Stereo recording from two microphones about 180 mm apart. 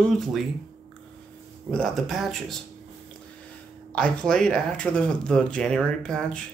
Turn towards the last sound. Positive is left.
turn(degrees=5)  # may be behind; listen again after turning